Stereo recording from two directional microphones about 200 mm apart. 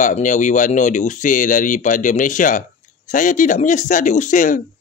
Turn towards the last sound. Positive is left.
turn(degrees=40)  # may be behind; listen again after turning